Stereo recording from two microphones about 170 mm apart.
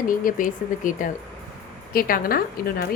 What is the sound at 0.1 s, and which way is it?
A woman's voice, 55° left (ahead or behind).